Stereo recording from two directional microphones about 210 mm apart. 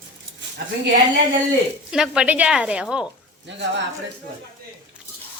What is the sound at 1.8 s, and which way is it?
Speech, 5° right (ahead or behind).